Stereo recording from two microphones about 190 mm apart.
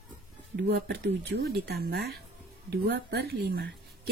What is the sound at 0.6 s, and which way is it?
Speech, 65° right (ahead or behind).